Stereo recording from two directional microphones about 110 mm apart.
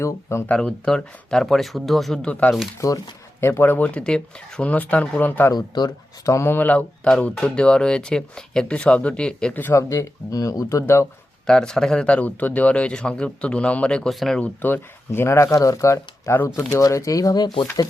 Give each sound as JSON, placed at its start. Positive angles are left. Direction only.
{"t": 0.0, "sound": "speech", "side_deg": 25}
{"t": 0.4, "sound": "speech", "side_deg": 10}
{"t": 2.8, "sound": "speech", "side_deg": 30}
{"t": 3.4, "sound": "speech", "side_deg": 20}
{"t": 5.5, "sound": "speech", "side_deg": 40}
{"t": 6.2, "sound": "speech", "side_deg": 25}
{"t": 11.4, "sound": "speech", "side_deg": 5}